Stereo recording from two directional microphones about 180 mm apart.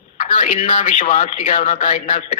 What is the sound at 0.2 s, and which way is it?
A woman's voice, 45° left (ahead or behind).